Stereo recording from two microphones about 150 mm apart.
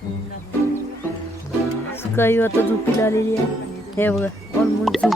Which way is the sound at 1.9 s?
15° left (ahead or behind).